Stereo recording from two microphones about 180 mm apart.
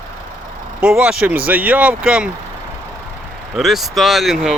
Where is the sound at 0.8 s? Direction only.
5° right (ahead or behind).